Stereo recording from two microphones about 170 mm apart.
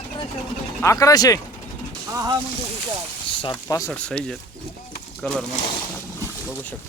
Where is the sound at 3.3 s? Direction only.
30° left (ahead or behind).